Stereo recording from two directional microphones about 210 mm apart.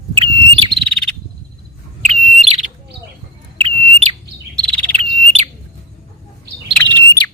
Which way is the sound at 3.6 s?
25° right (ahead or behind).